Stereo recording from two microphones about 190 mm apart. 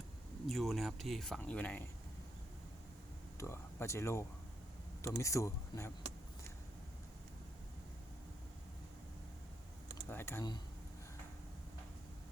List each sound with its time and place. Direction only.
0.4 s speech: centre (ahead or behind)
3.3 s speech: 15° left (ahead or behind)
10.1 s speech: 10° left (ahead or behind)